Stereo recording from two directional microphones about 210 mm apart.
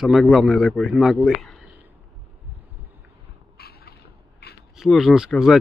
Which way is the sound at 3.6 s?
50° left (ahead or behind).